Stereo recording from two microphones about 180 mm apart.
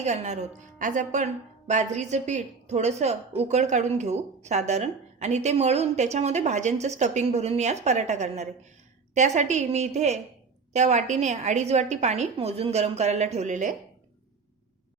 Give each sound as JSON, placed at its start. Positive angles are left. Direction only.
{"t": 0.0, "sound": "a woman's voice", "side_deg": -40}